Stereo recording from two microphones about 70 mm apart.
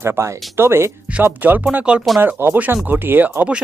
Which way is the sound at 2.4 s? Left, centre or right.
Right.